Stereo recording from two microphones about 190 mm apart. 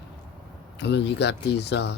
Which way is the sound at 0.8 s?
65° left (ahead or behind).